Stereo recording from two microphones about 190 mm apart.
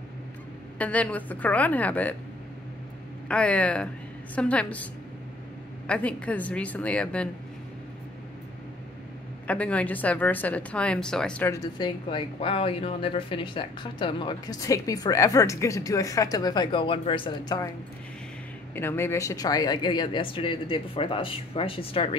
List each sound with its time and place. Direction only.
0.7 s a woman's voice: 5° left (ahead or behind)
3.3 s a woman's voice: 5° left (ahead or behind)
5.9 s a woman's voice: 5° left (ahead or behind)
9.5 s speech: 5° left (ahead or behind); by 17.6 s 25° left (ahead or behind)
18.8 s speech: 10° left (ahead or behind); by 22.1 s 30° left (ahead or behind)